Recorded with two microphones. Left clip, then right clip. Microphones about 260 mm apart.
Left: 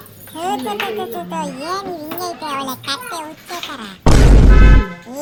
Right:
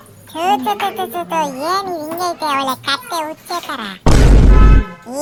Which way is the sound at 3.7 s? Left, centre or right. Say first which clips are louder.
Left 1 dB; centre.